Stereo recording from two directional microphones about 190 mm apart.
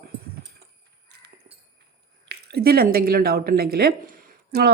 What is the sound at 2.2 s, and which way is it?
A woman's voice, 55° right (ahead or behind).